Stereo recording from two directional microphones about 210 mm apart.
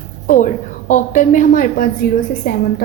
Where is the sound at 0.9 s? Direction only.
35° left (ahead or behind).